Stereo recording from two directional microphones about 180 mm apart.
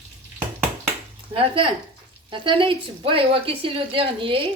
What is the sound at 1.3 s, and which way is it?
A woman's voice, 30° right (ahead or behind).